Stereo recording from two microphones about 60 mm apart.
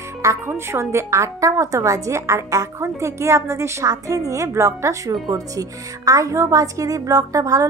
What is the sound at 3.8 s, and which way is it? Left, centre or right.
A woman's voice, right.